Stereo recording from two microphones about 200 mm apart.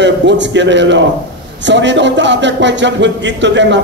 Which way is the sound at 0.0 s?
60° right (ahead or behind).